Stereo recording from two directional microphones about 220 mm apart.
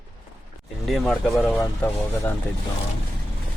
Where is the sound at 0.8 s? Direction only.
Centre (ahead or behind).